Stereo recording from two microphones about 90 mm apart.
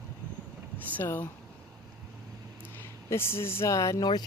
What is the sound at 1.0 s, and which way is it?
Speech, 25° left (ahead or behind).